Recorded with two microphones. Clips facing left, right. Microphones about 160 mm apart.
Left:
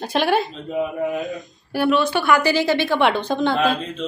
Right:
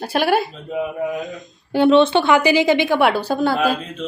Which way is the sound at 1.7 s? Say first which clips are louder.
Right 6 dB; 25° right (ahead or behind).